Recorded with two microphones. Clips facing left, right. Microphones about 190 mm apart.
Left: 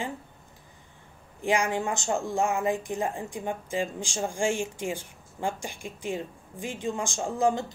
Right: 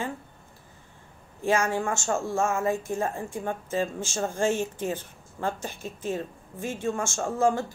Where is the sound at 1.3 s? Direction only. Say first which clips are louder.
Right 1 dB; 15° left (ahead or behind).